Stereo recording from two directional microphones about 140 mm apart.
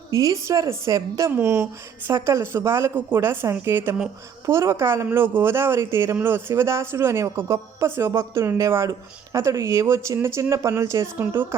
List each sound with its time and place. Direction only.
0.1 s a woman's voice: 25° right (ahead or behind)